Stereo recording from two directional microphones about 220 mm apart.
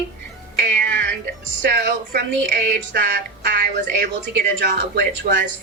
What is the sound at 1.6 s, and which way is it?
Speech, 45° right (ahead or behind).